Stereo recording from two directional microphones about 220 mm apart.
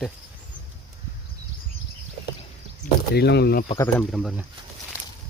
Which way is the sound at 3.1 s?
50° left (ahead or behind).